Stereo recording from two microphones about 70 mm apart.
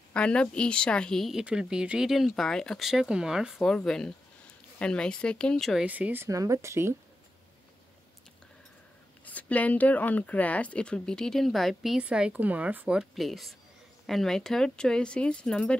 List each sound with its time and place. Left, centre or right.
0.1 s speech: centre
1.4 s speech: centre
2.9 s speech: centre
3.6 s speech: centre
5.9 s speech: right
6.2 s speech: right
9.2 s speech: left; by 12.0 s centre
12.0 s speech: centre
13.1 s speech: centre